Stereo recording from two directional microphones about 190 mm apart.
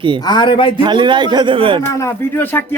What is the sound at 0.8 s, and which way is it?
Speech, 25° right (ahead or behind).